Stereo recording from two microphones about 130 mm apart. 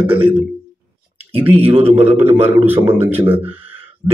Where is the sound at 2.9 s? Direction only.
15° right (ahead or behind).